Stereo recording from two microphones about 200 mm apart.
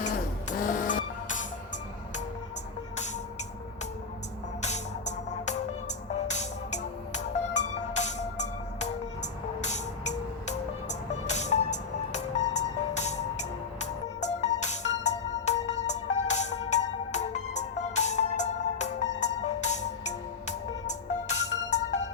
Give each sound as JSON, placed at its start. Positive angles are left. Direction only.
{"t": 0.0, "sound": "music", "side_deg": 40}
{"t": 4.6, "sound": "music", "side_deg": 35}